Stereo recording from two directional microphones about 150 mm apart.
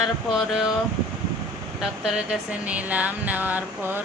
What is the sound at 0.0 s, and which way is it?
Speech, 5° right (ahead or behind).